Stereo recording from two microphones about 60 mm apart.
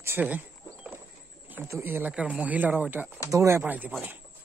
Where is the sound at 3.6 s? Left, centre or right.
Right.